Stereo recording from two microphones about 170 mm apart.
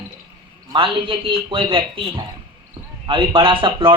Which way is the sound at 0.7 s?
30° right (ahead or behind).